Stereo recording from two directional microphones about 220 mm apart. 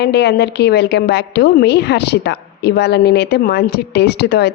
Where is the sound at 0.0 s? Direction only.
50° left (ahead or behind).